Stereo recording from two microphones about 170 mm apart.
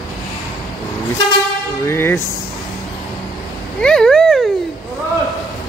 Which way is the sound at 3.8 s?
5° left (ahead or behind).